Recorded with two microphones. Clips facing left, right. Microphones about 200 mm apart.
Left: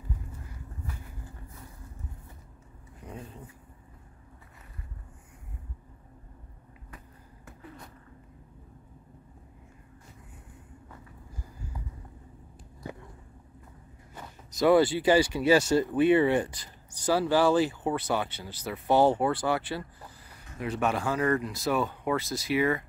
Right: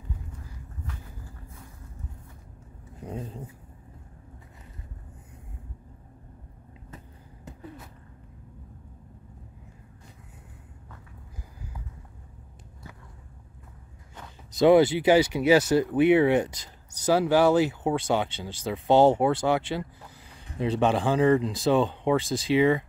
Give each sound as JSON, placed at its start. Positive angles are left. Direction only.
{"t": 3.1, "sound": "speech", "side_deg": -25}
{"t": 14.6, "sound": "speech", "side_deg": -20}
{"t": 20.5, "sound": "speech", "side_deg": -30}
{"t": 21.2, "sound": "speech", "side_deg": -20}
{"t": 21.5, "sound": "speech", "side_deg": -30}